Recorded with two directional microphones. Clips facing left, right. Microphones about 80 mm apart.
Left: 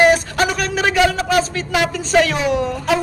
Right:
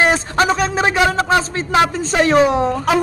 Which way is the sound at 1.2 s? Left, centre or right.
Right.